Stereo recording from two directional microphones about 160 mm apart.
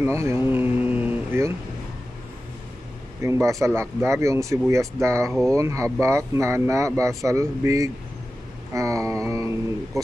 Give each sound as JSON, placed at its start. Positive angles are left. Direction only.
{"t": 0.0, "sound": "speech", "side_deg": -15}
{"t": 3.2, "sound": "speech", "side_deg": -20}
{"t": 8.7, "sound": "a sound", "side_deg": -20}